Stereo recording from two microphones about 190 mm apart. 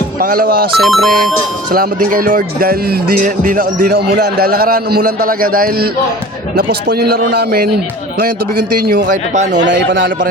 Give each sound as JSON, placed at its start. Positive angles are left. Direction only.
{"t": 0.2, "sound": "speech", "side_deg": -50}
{"t": 0.8, "sound": "speech", "side_deg": 0}
{"t": 1.7, "sound": "speech", "side_deg": -50}
{"t": 8.8, "sound": "speech", "side_deg": -55}
{"t": 9.5, "sound": "a man's voice", "side_deg": -70}